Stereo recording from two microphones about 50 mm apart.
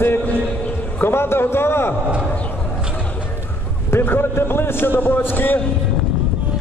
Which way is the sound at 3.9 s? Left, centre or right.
Left.